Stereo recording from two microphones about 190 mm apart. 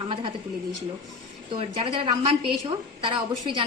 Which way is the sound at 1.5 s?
25° right (ahead or behind).